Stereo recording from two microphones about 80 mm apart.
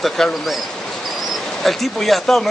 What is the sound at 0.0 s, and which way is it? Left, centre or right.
Speech, centre.